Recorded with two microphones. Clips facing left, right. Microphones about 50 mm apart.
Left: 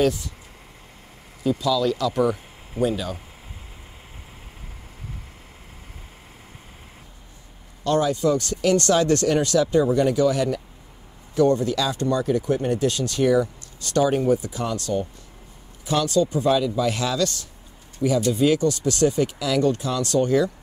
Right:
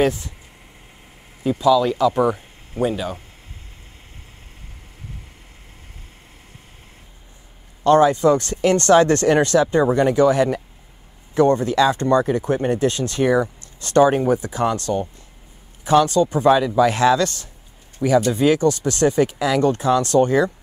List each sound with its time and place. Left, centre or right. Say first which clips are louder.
0.0 s speech: right 2 dB; right
1.4 s speech: right 5 dB; right
7.8 s speech: right 7 dB; right
18.0 s speech: right 3 dB; right